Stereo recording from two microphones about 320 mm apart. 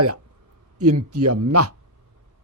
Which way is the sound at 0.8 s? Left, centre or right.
Right.